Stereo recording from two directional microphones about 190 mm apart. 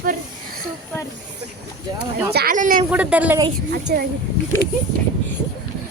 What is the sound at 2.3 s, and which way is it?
Speech, 45° right (ahead or behind).